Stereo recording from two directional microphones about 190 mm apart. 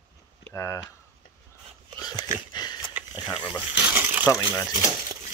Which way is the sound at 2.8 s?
10° right (ahead or behind).